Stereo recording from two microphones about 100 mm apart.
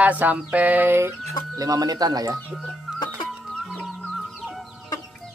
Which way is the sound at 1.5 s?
35° right (ahead or behind).